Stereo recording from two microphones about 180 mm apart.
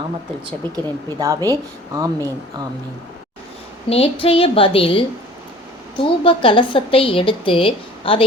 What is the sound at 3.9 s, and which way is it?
A woman's voice, 30° left (ahead or behind).